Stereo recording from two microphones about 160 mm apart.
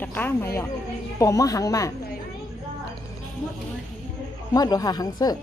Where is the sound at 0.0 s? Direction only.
10° left (ahead or behind).